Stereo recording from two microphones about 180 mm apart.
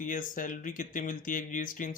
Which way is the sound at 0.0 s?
50° left (ahead or behind).